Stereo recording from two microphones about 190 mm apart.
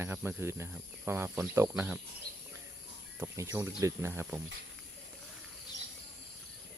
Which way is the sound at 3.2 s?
15° right (ahead or behind).